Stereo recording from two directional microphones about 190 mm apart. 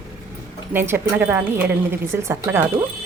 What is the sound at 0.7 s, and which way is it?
A woman's voice, 10° right (ahead or behind).